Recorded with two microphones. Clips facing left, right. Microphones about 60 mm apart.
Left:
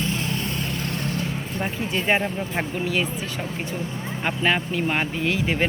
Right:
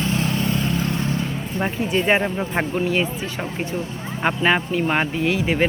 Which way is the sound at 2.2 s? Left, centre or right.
Right.